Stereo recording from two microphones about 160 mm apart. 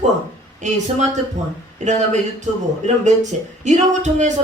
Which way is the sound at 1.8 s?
50° right (ahead or behind).